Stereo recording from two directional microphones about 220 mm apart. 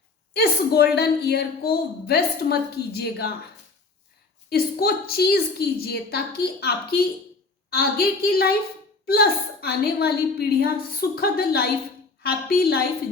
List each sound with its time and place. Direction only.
0.3 s a woman's voice: 45° left (ahead or behind)
4.4 s a woman's voice: 45° left (ahead or behind)